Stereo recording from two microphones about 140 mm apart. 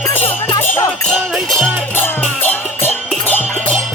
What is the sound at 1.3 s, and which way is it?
Music, centre (ahead or behind).